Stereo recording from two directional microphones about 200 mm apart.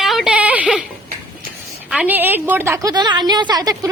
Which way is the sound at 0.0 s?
Centre (ahead or behind).